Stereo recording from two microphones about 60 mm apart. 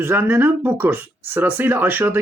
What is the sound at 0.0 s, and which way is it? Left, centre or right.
Speech, right.